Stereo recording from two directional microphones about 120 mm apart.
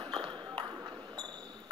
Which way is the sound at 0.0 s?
35° right (ahead or behind).